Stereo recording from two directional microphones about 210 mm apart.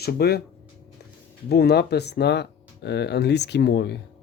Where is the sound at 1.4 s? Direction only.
50° left (ahead or behind).